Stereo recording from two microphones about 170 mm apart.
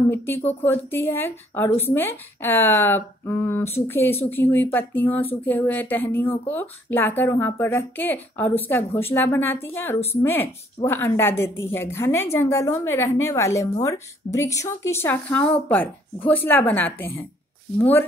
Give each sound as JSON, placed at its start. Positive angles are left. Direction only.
{"t": 0.1, "sound": "speech", "side_deg": 15}